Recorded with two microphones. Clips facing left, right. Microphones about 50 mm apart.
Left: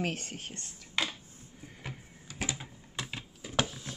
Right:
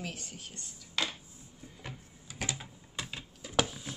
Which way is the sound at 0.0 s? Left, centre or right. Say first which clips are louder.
Left 7 dB; left.